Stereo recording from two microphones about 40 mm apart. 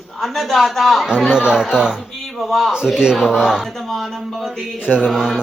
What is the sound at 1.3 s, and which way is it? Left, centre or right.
Speech, right.